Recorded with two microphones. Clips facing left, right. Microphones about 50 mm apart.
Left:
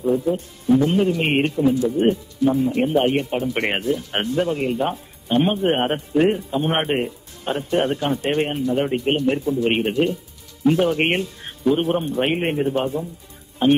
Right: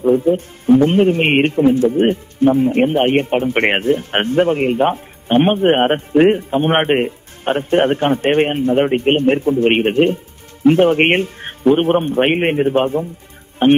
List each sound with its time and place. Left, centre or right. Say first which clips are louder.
0.0 s a man's voice: right 6 dB; right